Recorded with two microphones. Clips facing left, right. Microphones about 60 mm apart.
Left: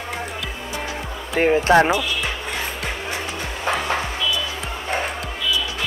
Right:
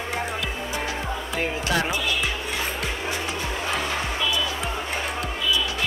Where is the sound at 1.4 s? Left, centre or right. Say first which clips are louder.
Left 11 dB; left.